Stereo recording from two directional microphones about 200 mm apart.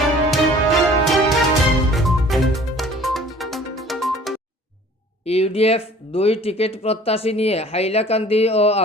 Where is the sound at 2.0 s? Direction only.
Centre (ahead or behind).